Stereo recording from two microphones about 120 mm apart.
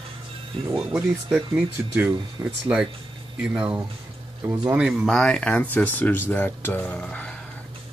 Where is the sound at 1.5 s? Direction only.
10° right (ahead or behind).